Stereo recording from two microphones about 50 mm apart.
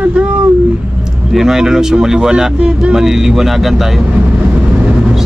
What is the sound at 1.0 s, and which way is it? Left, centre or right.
Speech, centre.